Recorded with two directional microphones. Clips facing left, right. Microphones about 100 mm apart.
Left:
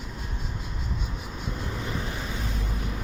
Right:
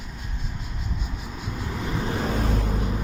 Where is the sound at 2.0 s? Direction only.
35° right (ahead or behind).